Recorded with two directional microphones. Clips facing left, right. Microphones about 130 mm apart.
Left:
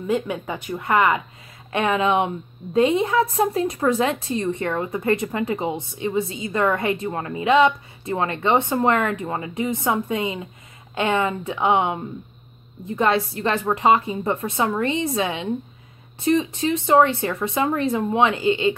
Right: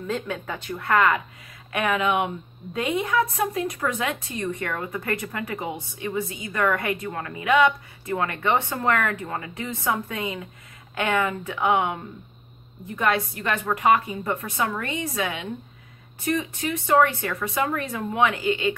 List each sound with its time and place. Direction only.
0.0 s a woman's voice: 15° left (ahead or behind)